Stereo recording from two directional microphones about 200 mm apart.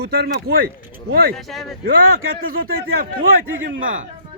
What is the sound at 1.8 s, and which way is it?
A man's voice, 45° right (ahead or behind).